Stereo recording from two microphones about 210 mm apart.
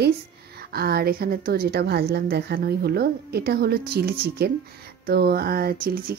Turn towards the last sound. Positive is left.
turn(degrees=-45)  # may be behind; listen again after turning